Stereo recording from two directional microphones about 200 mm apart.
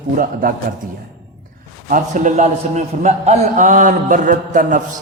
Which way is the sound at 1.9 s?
40° right (ahead or behind).